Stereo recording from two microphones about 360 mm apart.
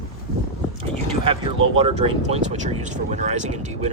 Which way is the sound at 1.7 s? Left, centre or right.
Centre.